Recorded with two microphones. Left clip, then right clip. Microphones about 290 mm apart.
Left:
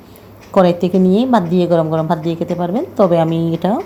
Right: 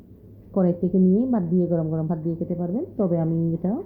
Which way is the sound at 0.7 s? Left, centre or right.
Left.